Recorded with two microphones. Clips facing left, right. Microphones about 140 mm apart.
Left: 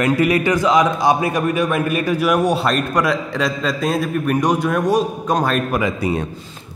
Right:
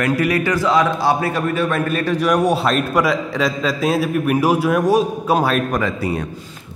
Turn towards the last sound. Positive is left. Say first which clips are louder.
# left 1 dB
turn(degrees=25)  # may be behind; listen again after turning